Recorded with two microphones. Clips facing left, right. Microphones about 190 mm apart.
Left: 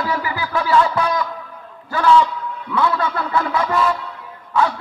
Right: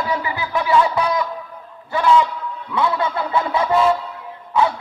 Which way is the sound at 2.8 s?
20° right (ahead or behind).